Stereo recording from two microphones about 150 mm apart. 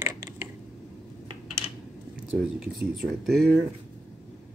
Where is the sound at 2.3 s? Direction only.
Centre (ahead or behind).